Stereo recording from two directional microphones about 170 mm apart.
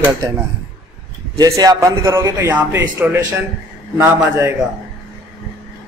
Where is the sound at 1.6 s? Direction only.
20° right (ahead or behind).